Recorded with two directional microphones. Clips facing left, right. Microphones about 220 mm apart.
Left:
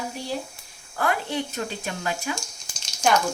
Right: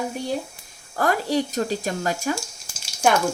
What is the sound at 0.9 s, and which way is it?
Speech, 40° right (ahead or behind).